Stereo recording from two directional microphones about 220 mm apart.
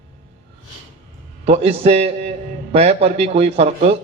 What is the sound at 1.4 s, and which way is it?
A man's voice, 30° right (ahead or behind).